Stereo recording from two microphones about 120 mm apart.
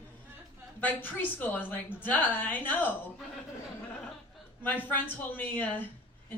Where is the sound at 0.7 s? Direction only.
15° left (ahead or behind).